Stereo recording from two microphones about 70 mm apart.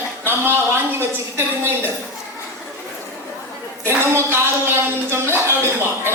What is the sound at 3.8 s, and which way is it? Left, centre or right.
A woman's voice, right.